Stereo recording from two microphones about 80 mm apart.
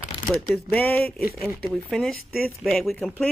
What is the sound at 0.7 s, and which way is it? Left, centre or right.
Speech, left.